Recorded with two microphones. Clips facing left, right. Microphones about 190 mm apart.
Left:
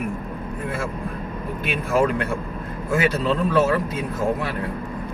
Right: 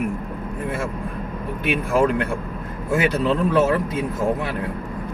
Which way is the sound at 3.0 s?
15° right (ahead or behind).